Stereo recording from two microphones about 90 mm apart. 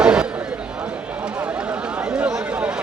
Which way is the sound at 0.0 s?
10° right (ahead or behind).